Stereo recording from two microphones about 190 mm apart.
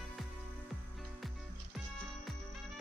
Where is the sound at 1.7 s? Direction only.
Centre (ahead or behind).